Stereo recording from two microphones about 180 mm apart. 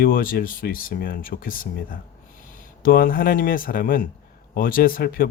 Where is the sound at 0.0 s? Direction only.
50° left (ahead or behind).